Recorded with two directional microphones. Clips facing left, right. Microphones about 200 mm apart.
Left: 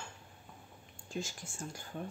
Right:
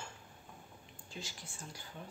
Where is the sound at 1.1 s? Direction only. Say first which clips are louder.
Left 8 dB; 45° left (ahead or behind).